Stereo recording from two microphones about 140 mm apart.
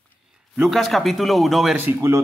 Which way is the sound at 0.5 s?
Centre (ahead or behind).